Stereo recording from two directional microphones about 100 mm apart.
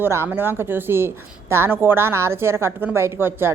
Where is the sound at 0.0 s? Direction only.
25° right (ahead or behind).